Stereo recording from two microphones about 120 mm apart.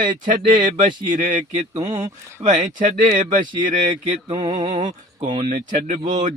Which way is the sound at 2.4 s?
75° right (ahead or behind).